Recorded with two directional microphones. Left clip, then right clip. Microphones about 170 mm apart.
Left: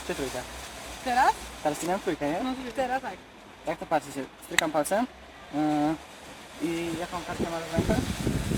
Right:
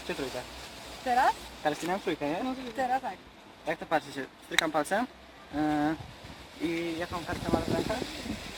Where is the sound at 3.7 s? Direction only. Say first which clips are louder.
Left 2 dB; 25° left (ahead or behind).